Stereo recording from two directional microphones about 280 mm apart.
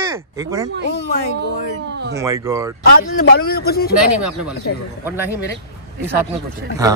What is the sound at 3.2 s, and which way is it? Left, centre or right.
Speech, left.